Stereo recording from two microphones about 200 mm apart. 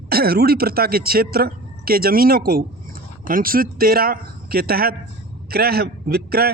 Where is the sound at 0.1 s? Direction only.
50° right (ahead or behind).